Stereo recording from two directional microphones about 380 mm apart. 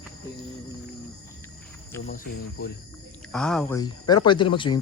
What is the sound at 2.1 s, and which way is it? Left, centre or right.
Speech, left.